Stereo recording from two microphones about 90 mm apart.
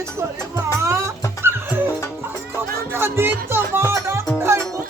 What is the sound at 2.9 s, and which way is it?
Music, 25° right (ahead or behind).